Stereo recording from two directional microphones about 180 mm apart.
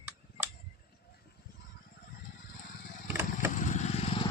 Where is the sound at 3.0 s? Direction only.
10° right (ahead or behind).